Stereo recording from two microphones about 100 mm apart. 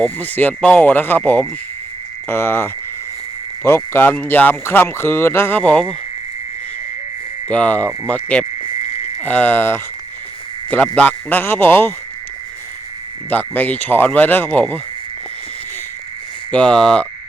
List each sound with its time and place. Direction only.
0.0 s speech: 20° left (ahead or behind)
7.5 s speech: 15° left (ahead or behind)
8.6 s a sound: 75° left (ahead or behind)
9.2 s speech: 20° left (ahead or behind)
13.3 s speech: 20° left (ahead or behind)
16.5 s speech: 10° left (ahead or behind)